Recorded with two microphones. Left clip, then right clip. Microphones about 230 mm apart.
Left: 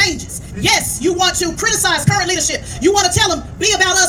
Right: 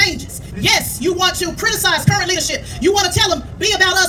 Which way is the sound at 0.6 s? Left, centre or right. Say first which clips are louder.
Left 1 dB; left.